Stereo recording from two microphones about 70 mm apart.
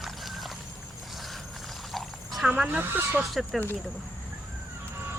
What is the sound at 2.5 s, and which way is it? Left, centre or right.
Speech, centre.